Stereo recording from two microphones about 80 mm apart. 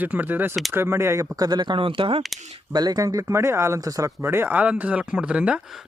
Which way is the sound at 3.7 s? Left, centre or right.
Right.